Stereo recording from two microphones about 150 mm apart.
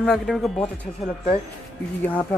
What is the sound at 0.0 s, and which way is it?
Speech, centre (ahead or behind).